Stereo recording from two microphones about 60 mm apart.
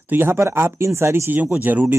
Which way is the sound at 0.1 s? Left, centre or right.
Right.